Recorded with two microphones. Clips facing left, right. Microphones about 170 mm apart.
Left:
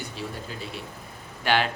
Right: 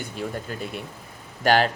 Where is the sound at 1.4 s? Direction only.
40° right (ahead or behind).